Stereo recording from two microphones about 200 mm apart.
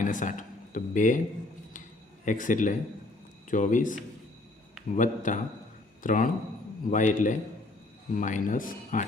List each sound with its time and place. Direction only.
0.0 s speech: 40° left (ahead or behind)
2.2 s speech: 40° left (ahead or behind)
4.9 s a man's voice: 40° left (ahead or behind)